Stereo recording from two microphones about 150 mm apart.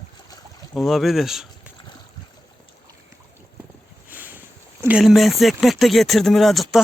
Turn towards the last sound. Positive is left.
turn(degrees=0)  # may be behind; listen again after turning